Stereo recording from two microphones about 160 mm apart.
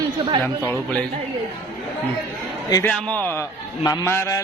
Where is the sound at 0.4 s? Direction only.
10° left (ahead or behind).